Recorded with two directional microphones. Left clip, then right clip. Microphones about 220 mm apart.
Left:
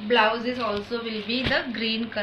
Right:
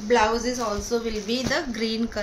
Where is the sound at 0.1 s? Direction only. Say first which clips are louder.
Even; 70° right (ahead or behind).